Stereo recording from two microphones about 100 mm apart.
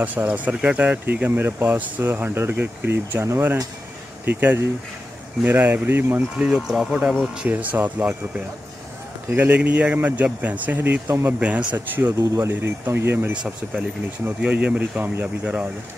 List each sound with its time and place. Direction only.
0.0 s speech: 15° right (ahead or behind)
5.4 s speech: 20° right (ahead or behind)
6.3 s speech: 5° right (ahead or behind)
7.4 s speech: 15° right (ahead or behind)
9.3 s speech: 15° right (ahead or behind)
12.2 s speech: 25° right (ahead or behind)